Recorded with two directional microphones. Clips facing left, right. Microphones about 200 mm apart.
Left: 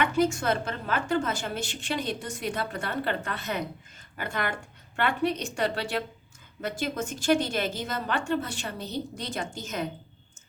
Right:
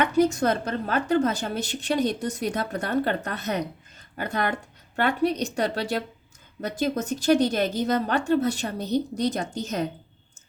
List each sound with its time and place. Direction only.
0.0 s a woman's voice: 40° right (ahead or behind)